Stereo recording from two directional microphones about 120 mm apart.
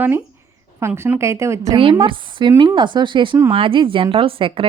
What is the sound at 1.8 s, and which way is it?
A woman's voice, 45° right (ahead or behind).